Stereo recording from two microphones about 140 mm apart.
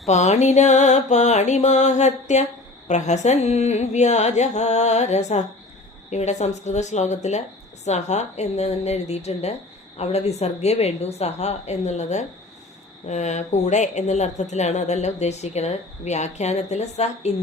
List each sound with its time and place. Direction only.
0.0 s music: 55° left (ahead or behind)
7.9 s a woman's voice: 55° left (ahead or behind)
13.1 s music: 55° left (ahead or behind)